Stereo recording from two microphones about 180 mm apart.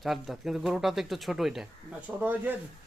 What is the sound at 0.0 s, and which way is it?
A man's voice, centre (ahead or behind).